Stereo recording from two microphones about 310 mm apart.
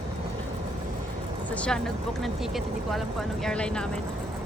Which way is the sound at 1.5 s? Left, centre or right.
Centre.